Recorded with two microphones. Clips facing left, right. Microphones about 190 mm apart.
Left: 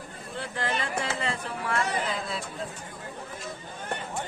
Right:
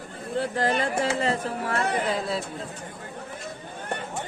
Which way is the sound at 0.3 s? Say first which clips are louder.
Right 7 dB; 35° right (ahead or behind).